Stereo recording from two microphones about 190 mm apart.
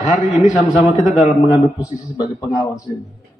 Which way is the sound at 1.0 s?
5° right (ahead or behind).